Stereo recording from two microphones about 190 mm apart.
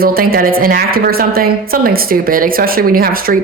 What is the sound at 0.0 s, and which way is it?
A woman's voice, 50° right (ahead or behind).